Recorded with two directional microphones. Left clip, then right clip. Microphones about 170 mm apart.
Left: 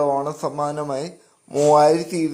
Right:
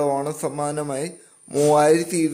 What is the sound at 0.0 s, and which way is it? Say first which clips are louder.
Speech: left 2 dB; 20° right (ahead or behind).